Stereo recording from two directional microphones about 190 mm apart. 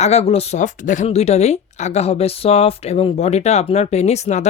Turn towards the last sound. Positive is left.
turn(degrees=35)  # may be behind; listen again after turning